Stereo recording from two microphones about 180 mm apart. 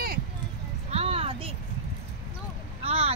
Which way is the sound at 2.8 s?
35° right (ahead or behind).